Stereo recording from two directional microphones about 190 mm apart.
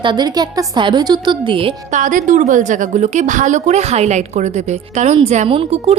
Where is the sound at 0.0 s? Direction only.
25° right (ahead or behind).